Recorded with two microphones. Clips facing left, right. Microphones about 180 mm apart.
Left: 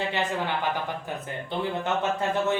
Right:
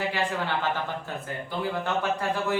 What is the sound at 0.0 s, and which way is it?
A man's voice, 20° left (ahead or behind).